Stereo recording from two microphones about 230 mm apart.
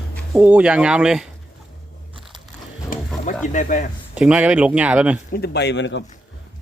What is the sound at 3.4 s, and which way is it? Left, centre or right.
Speech, left.